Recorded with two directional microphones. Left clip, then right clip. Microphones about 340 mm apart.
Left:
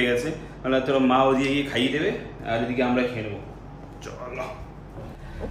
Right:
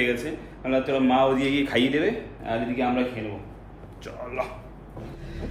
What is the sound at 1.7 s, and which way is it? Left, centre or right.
Speech, centre.